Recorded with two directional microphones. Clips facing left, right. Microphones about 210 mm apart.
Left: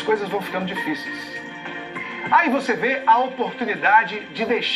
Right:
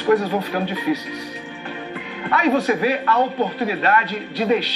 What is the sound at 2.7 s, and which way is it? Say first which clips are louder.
Speech: right 2 dB; 40° right (ahead or behind).